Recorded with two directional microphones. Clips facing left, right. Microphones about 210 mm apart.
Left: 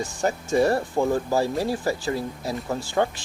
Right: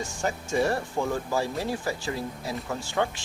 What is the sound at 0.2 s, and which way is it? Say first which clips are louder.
Speech: left 5 dB; 40° left (ahead or behind).